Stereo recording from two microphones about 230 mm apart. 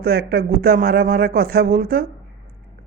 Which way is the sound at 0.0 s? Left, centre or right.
Right.